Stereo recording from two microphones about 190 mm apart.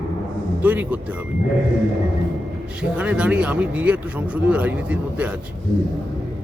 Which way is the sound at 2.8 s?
5° right (ahead or behind).